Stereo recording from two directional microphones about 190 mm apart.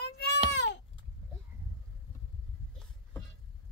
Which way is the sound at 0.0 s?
60° left (ahead or behind).